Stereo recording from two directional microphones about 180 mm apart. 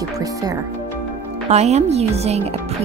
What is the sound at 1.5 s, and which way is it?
Speech, 35° right (ahead or behind).